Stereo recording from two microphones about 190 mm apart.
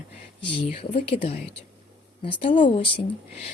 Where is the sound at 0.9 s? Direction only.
30° left (ahead or behind).